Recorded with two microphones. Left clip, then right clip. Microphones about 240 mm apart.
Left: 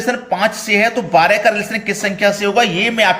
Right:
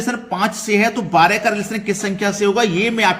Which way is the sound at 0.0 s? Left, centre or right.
Centre.